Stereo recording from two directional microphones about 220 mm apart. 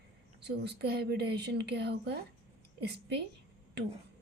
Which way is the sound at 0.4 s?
45° right (ahead or behind).